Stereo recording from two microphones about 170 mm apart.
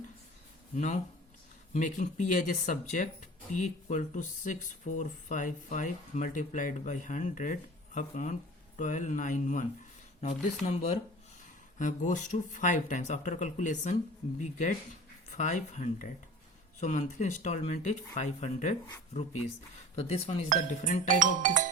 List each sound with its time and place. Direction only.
1.7 s speech: 45° left (ahead or behind)
20.0 s speech: 35° left (ahead or behind)
21.2 s music: 50° right (ahead or behind)